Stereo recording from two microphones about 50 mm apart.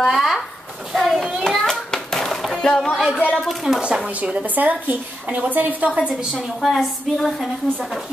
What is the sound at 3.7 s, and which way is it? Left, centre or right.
Speech, centre.